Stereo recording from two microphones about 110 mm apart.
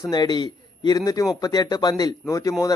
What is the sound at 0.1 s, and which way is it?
Speech, 40° left (ahead or behind).